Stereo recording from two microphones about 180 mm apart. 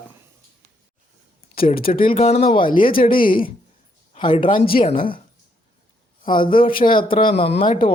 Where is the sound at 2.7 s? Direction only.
50° left (ahead or behind).